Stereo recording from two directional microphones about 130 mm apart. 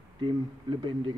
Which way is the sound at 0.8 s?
40° right (ahead or behind).